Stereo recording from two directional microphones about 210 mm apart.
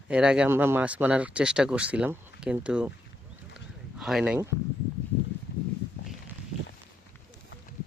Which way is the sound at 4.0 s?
Centre (ahead or behind).